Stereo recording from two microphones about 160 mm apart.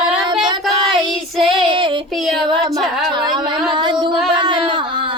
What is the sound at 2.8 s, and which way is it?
Music, centre (ahead or behind).